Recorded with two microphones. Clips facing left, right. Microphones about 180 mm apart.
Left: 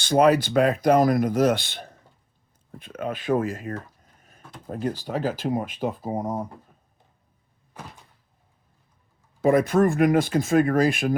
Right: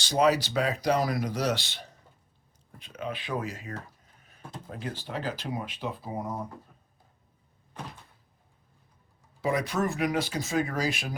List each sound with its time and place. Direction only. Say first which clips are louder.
0.0 s speech: left 6 dB; 55° left (ahead or behind)
4.2 s a sound: left 5 dB; 45° left (ahead or behind)
4.6 s speech: left 10 dB; 45° left (ahead or behind)
9.4 s speech: left 9 dB; 50° left (ahead or behind)